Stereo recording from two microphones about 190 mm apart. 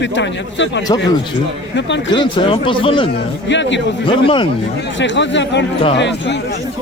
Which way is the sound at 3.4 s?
70° left (ahead or behind).